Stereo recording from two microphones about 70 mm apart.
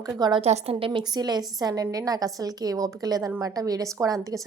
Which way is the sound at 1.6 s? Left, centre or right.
Right.